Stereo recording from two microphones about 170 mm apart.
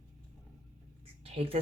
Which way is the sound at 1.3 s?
35° right (ahead or behind).